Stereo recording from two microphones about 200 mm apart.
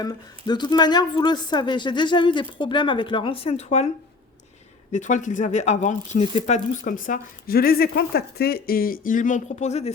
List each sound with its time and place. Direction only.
0.0 s a woman's voice: 20° left (ahead or behind)
4.9 s speech: 35° left (ahead or behind)